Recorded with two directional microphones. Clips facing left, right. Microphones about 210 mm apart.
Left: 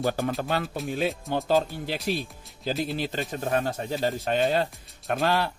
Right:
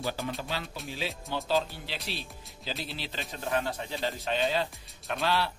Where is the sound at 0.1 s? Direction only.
55° left (ahead or behind).